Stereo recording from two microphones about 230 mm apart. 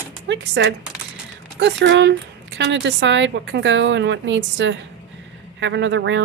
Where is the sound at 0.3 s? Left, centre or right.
Right.